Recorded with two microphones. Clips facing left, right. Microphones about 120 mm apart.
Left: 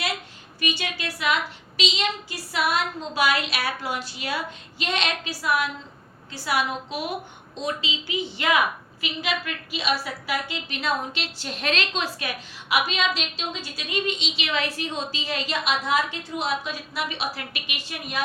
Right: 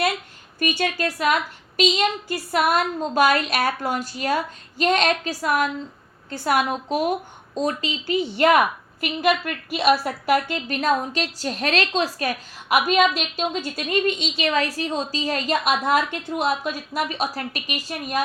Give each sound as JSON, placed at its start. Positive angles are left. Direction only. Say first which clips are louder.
{"t": 0.6, "sound": "a woman's voice", "louder": "right 6 dB", "side_deg": -45}